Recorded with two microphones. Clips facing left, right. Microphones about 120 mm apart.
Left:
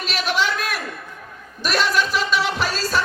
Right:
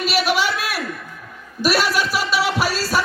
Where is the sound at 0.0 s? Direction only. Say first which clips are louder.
Right 3 dB; 10° right (ahead or behind).